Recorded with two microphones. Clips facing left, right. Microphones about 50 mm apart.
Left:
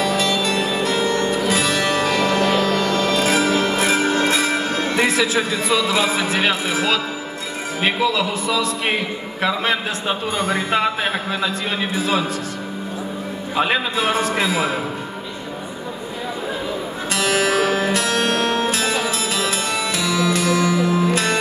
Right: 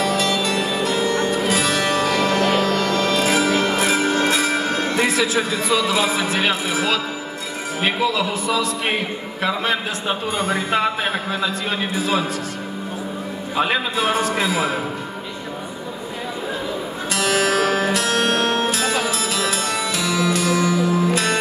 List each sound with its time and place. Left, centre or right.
0.4 s music: left
2.4 s a sound: right
2.7 s music: left
4.7 s a man's voice: left
13.6 s a man's voice: left
17.1 s music: left
18.0 s music: right
19.0 s music: left
20.0 s music: right
20.3 s music: left